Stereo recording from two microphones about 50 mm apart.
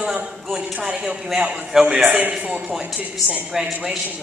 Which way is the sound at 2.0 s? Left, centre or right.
Right.